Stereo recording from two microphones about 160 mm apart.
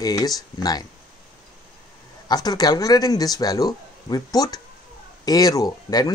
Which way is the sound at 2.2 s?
25° left (ahead or behind).